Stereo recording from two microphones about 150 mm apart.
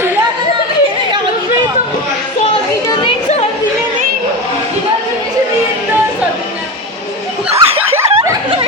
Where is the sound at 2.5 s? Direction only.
35° left (ahead or behind).